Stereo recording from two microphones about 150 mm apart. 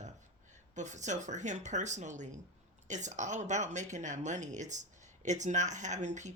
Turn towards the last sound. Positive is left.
turn(degrees=-50)  # may be behind; listen again after turning